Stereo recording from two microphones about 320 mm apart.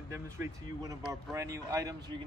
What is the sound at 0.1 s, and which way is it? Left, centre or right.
Speech, centre.